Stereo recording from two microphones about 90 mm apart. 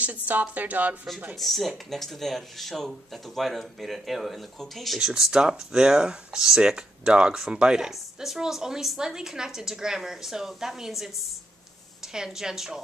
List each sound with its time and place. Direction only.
0.0 s speech: 15° right (ahead or behind)
1.3 s speech: centre (ahead or behind)
12.1 s speech: 5° right (ahead or behind)